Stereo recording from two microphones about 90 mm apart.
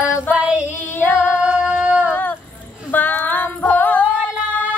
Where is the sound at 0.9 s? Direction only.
25° left (ahead or behind).